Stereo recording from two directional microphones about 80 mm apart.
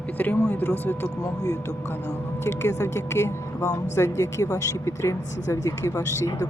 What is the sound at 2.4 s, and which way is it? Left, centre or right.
Speech, left.